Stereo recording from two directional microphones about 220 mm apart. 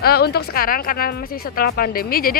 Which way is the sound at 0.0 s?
45° left (ahead or behind).